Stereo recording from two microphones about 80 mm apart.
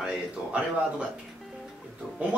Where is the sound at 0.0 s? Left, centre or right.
Centre.